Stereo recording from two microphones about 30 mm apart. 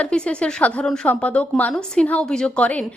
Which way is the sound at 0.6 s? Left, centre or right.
Left.